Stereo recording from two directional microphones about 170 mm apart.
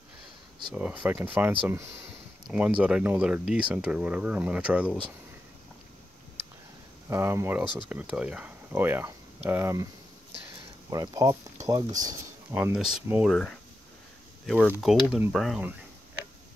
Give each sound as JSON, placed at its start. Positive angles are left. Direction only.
{"t": 0.7, "sound": "speech", "side_deg": -10}
{"t": 7.1, "sound": "speech", "side_deg": -15}
{"t": 10.9, "sound": "speech", "side_deg": -20}
{"t": 12.4, "sound": "speech", "side_deg": -10}